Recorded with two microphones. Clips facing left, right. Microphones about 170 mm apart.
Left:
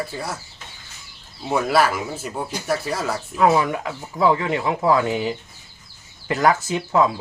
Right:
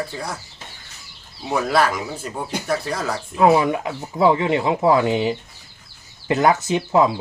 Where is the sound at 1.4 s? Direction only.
5° left (ahead or behind).